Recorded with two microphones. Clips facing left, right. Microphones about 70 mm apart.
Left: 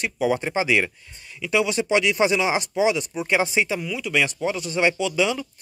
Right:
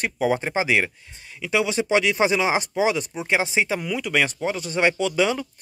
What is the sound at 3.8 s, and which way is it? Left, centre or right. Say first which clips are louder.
Speech: right 1 dB; right.